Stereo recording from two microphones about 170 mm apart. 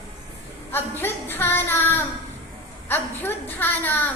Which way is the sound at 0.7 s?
10° left (ahead or behind).